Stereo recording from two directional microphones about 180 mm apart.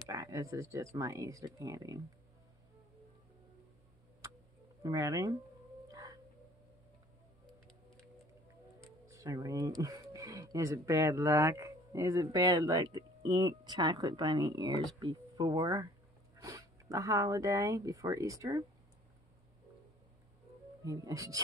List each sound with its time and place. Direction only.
0.1 s speech: 15° right (ahead or behind)
4.8 s speech: 20° right (ahead or behind)
5.9 s music: 20° right (ahead or behind)
9.0 s speech: 15° right (ahead or behind)
20.8 s speech: 20° right (ahead or behind)